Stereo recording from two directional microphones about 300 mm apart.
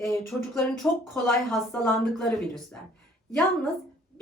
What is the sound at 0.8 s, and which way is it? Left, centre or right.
Speech, centre.